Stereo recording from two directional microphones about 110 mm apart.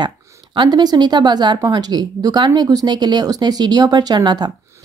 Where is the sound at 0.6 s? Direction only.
40° right (ahead or behind).